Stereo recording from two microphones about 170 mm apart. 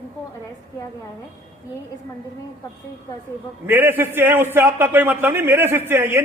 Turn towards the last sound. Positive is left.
turn(degrees=-10)  # may be behind; listen again after turning